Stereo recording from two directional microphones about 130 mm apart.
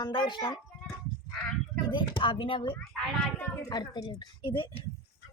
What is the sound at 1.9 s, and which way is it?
Speech, 35° left (ahead or behind).